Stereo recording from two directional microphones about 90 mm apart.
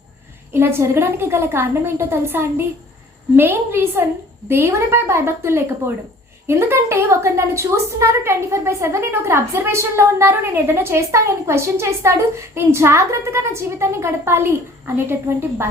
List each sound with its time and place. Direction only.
0.5 s a woman's voice: 25° right (ahead or behind)